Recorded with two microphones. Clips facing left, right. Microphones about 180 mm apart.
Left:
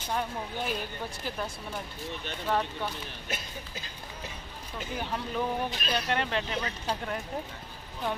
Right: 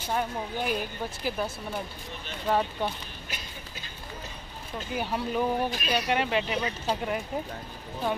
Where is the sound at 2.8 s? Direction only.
15° right (ahead or behind).